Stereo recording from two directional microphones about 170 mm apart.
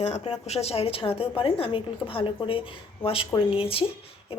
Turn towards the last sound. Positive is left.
turn(degrees=35)  # may be behind; listen again after turning